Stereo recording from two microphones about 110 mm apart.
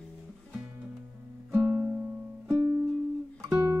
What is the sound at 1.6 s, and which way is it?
Music, 10° right (ahead or behind).